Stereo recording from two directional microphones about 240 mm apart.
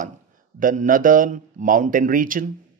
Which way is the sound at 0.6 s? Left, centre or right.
Right.